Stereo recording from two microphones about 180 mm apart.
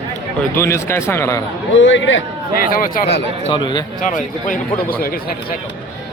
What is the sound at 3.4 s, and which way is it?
Speech, 25° left (ahead or behind).